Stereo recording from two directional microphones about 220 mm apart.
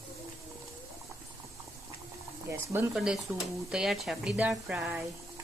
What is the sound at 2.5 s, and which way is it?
Speech, 10° right (ahead or behind).